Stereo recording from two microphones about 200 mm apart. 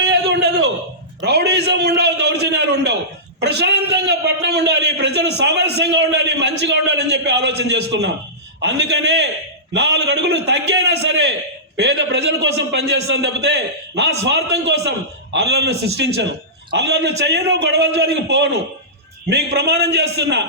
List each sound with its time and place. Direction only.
0.0 s a sound: 55° right (ahead or behind)
1.2 s a man's voice: 55° right (ahead or behind)
11.8 s a man's voice: 60° right (ahead or behind)